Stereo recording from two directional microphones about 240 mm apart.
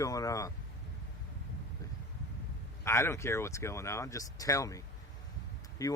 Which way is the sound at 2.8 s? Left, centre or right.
Centre.